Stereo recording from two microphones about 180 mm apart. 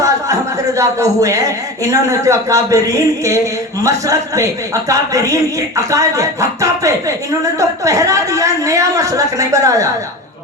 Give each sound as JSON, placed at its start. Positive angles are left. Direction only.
{"t": 0.0, "sound": "a woman's voice", "side_deg": -20}